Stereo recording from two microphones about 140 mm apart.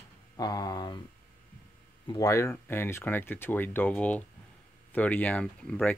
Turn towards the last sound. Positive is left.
turn(degrees=10)  # may be behind; listen again after turning